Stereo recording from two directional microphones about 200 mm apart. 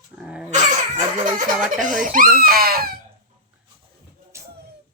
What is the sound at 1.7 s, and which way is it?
Speech, 40° right (ahead or behind).